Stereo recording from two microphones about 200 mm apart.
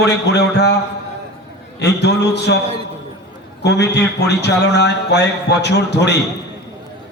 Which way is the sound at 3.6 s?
55° left (ahead or behind).